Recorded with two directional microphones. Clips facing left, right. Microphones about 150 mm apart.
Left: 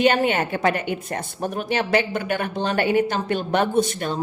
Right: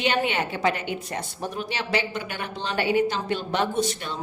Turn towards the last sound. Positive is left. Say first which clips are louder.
# left 5 dB
turn(degrees=50)  # may be behind; listen again after turning